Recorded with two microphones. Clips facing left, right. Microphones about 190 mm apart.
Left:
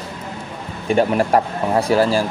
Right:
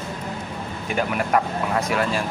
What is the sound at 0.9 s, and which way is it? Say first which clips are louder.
Speech: left 7 dB; 30° left (ahead or behind).